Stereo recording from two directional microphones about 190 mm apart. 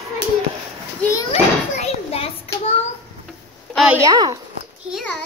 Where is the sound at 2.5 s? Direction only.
30° left (ahead or behind).